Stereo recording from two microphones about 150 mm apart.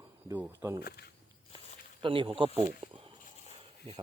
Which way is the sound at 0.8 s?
90° left.